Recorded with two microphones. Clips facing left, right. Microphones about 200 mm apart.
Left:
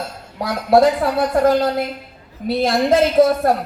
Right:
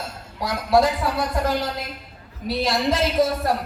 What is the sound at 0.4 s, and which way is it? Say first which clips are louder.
A woman's voice: left 5 dB; 55° left (ahead or behind).